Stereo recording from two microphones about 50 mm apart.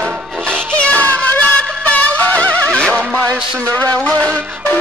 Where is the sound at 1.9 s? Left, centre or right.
Left.